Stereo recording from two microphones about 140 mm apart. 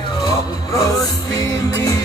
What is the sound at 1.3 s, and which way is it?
Music, 25° left (ahead or behind).